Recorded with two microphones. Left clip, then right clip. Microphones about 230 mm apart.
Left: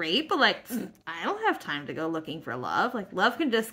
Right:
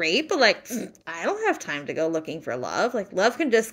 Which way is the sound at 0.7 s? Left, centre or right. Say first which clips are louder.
Right 3 dB; centre.